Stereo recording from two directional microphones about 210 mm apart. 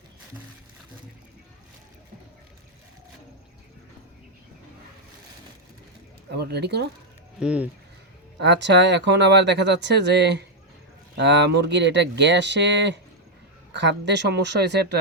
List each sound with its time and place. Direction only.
6.3 s speech: 50° right (ahead or behind)
7.3 s speech: 5° right (ahead or behind)
8.4 s speech: 55° right (ahead or behind)